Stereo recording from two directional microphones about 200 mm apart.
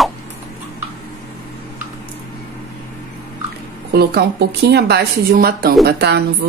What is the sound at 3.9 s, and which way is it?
A woman's voice, 55° right (ahead or behind).